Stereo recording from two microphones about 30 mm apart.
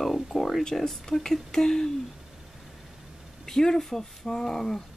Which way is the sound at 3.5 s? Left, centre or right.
Centre.